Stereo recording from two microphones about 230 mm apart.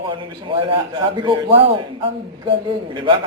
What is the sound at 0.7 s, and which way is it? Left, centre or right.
A man's voice, right.